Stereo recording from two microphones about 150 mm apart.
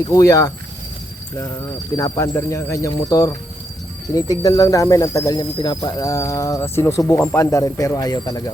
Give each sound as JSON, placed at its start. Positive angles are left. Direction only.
{"t": 0.1, "sound": "speech", "side_deg": 20}
{"t": 2.0, "sound": "speech", "side_deg": 25}